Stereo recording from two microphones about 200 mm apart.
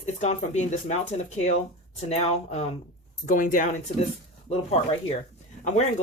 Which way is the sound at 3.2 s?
40° left (ahead or behind).